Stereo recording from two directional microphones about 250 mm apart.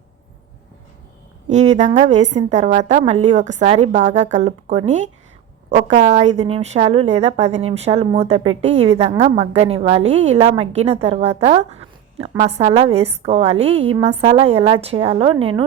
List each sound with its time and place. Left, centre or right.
1.5 s a woman's voice: right